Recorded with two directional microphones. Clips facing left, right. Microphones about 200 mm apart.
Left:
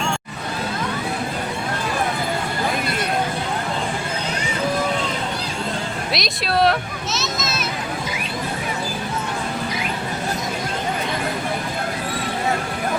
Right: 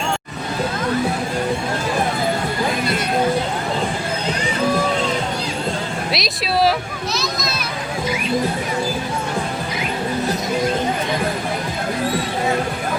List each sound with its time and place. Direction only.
6.1 s a child's voice: centre (ahead or behind)